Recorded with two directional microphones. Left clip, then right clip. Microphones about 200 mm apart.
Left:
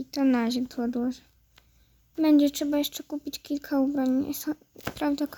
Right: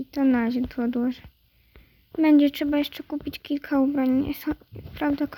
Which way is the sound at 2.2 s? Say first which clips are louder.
Right 3 dB; 5° right (ahead or behind).